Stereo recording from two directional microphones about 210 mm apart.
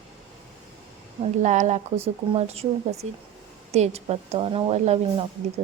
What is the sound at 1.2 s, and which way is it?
Speech, 35° right (ahead or behind).